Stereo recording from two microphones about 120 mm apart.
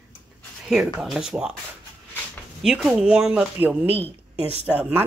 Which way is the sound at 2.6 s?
5° right (ahead or behind).